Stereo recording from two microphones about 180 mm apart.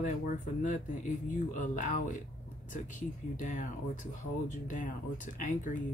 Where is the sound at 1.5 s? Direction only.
45° left (ahead or behind).